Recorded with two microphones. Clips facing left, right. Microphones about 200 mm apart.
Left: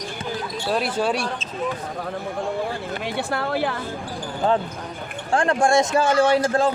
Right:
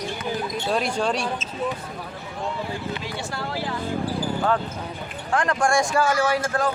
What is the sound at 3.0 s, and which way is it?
Speech, 60° left (ahead or behind).